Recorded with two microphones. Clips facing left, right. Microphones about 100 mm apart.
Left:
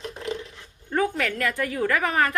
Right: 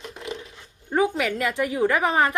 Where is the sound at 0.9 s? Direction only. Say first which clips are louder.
Right 2 dB; 15° right (ahead or behind).